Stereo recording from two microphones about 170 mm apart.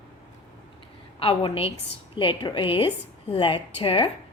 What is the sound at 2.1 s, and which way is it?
A woman's voice, 30° left (ahead or behind).